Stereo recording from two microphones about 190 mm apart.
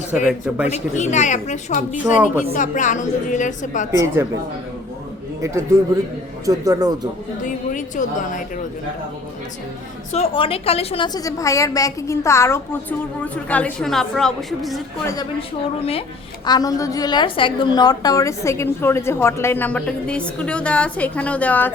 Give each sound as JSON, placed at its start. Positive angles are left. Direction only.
{"t": 0.3, "sound": "speech", "side_deg": -5}
{"t": 0.7, "sound": "a woman's voice", "side_deg": 40}
{"t": 3.9, "sound": "speech", "side_deg": -15}
{"t": 6.4, "sound": "speech", "side_deg": -20}
{"t": 7.4, "sound": "music", "side_deg": 45}
{"t": 10.1, "sound": "a woman's voice", "side_deg": 30}
{"t": 15.0, "sound": "a woman's voice", "side_deg": 20}
{"t": 16.5, "sound": "a woman's voice", "side_deg": 20}